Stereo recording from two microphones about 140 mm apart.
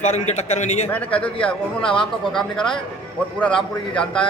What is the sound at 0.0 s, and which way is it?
Speech, 50° left (ahead or behind).